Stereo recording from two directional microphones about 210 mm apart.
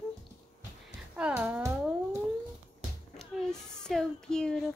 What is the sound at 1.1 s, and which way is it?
Speech, 5° right (ahead or behind).